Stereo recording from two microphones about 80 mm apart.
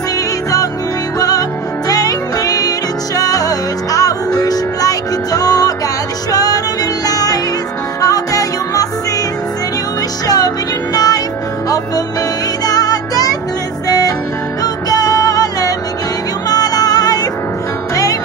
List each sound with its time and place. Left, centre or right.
1.9 s music: left
10.2 s music: left
12.6 s music: left